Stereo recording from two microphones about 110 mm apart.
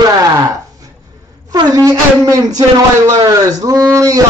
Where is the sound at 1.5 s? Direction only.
35° right (ahead or behind).